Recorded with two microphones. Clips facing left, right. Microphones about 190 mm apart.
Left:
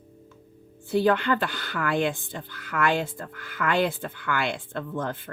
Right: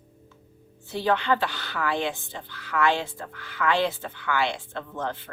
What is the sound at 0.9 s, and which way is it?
Speech, 55° left (ahead or behind).